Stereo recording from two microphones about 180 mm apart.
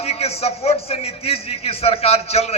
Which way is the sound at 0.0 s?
35° left (ahead or behind).